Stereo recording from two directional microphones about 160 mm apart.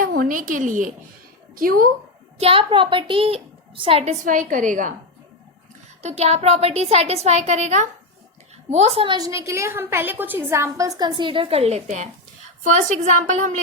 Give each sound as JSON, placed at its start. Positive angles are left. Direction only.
{"t": 0.0, "sound": "a woman's voice", "side_deg": -65}
{"t": 2.4, "sound": "a woman's voice", "side_deg": -35}
{"t": 4.0, "sound": "a woman's voice", "side_deg": -55}
{"t": 6.0, "sound": "a woman's voice", "side_deg": -45}
{"t": 9.1, "sound": "a woman's voice", "side_deg": -20}